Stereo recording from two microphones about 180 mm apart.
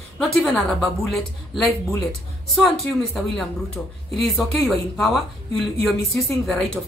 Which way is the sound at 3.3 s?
Centre (ahead or behind).